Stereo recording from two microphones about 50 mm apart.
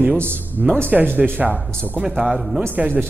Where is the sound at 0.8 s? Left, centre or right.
Right.